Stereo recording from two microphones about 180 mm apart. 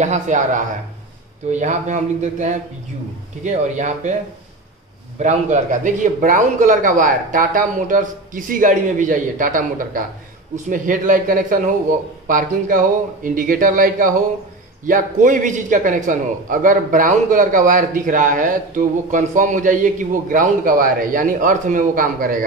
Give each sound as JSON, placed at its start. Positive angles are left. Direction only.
{"t": 0.0, "sound": "a man's voice", "side_deg": -40}
{"t": 5.2, "sound": "a man's voice", "side_deg": -45}